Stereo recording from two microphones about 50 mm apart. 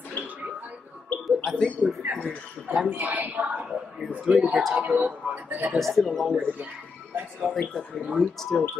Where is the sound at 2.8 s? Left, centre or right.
Right.